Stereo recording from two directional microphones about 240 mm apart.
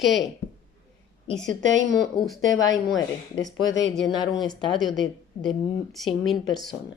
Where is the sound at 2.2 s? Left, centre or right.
Centre.